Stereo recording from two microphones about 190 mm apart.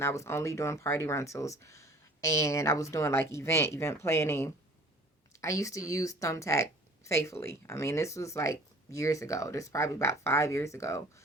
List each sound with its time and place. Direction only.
0.0 s speech: 15° left (ahead or behind)